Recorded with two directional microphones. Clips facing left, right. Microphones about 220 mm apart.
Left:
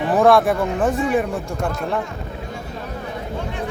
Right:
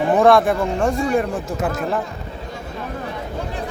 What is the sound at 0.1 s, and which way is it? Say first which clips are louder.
Speech: even; centre (ahead or behind).